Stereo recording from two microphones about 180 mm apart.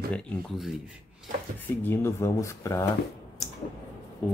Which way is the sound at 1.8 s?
15° left (ahead or behind).